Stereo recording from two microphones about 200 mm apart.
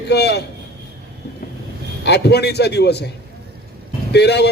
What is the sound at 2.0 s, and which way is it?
A man's voice, 55° left (ahead or behind).